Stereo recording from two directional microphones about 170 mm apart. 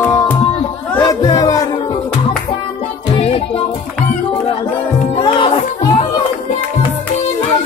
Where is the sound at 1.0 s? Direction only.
20° left (ahead or behind).